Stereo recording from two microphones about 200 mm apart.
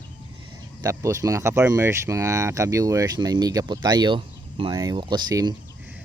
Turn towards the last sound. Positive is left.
turn(degrees=-20)  # may be behind; listen again after turning